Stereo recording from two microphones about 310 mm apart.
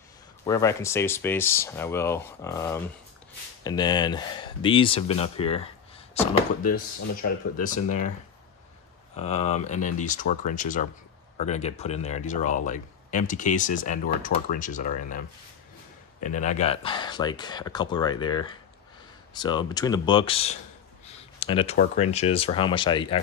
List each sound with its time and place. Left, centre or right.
0.5 s speech: centre
9.1 s speech: left